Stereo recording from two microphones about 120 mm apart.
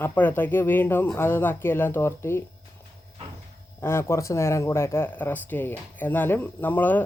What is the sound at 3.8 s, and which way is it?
Speech, 20° left (ahead or behind).